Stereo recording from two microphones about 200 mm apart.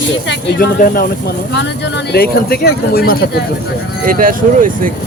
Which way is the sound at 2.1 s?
50° left (ahead or behind).